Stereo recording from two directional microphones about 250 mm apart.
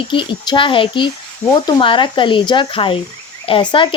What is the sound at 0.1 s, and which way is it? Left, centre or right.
Speech, centre.